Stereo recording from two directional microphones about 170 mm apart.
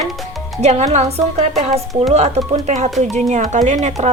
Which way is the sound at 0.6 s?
40° right (ahead or behind).